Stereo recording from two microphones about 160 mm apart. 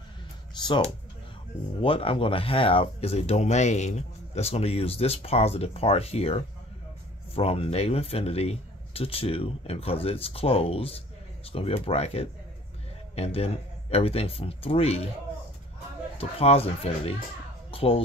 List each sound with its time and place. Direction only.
0.6 s speech: 25° left (ahead or behind)
16.2 s speech: 40° left (ahead or behind)
17.6 s music: 35° left (ahead or behind)